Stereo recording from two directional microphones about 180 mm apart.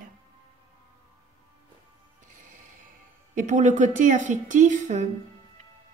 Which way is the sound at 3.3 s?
45° right (ahead or behind).